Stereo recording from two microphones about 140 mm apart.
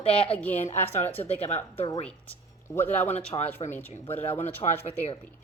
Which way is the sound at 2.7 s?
15° left (ahead or behind).